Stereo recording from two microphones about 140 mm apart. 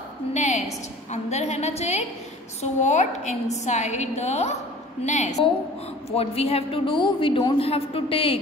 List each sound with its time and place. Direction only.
0.3 s a woman's voice: 55° left (ahead or behind)
6.1 s a woman's voice: 45° left (ahead or behind)